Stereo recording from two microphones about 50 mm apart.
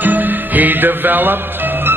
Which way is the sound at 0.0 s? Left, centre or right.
Right.